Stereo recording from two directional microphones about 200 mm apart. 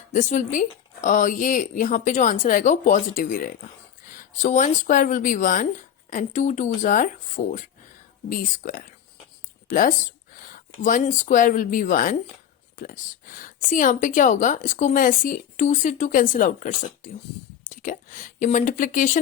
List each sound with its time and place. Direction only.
0.1 s speech: 40° left (ahead or behind)
10.3 s a sound: 45° left (ahead or behind)
10.8 s speech: 40° left (ahead or behind)